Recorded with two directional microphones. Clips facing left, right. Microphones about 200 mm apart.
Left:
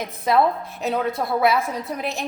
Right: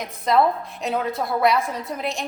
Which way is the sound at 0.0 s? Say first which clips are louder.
Even; centre (ahead or behind).